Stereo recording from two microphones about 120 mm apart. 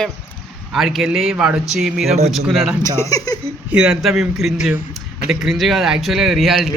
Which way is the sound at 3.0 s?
30° left (ahead or behind).